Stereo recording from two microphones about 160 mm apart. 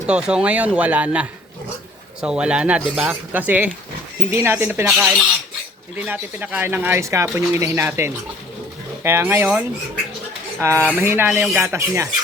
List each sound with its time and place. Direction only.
0.1 s speech: 5° right (ahead or behind)